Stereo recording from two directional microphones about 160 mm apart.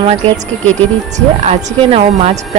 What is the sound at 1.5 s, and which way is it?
Speech, 40° right (ahead or behind).